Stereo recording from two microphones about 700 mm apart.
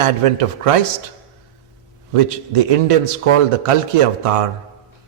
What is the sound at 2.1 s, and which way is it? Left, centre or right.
A man's voice, right.